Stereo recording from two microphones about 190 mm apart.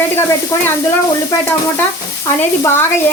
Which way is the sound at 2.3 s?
10° left (ahead or behind).